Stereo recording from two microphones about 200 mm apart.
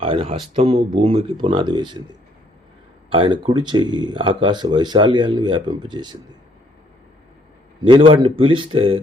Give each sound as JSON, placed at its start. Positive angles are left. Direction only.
{"t": 0.0, "sound": "speech", "side_deg": -30}
{"t": 3.1, "sound": "speech", "side_deg": -25}
{"t": 7.9, "sound": "speech", "side_deg": -25}